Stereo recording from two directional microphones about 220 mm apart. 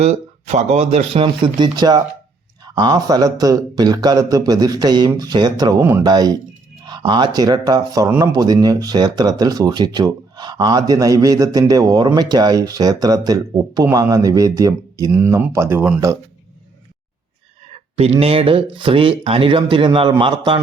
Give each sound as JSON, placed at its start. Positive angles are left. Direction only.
{"t": 0.0, "sound": "speech", "side_deg": -30}
{"t": 17.7, "sound": "speech", "side_deg": -25}